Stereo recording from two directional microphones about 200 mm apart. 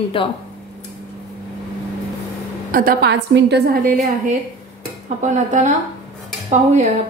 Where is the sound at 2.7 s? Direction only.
50° right (ahead or behind).